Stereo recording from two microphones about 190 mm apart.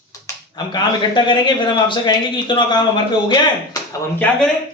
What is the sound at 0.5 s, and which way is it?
A man's voice, 25° left (ahead or behind).